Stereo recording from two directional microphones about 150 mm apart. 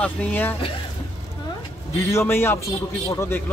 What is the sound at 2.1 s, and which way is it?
Speech, 15° left (ahead or behind).